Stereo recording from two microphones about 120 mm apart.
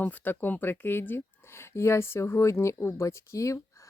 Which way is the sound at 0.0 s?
15° left (ahead or behind).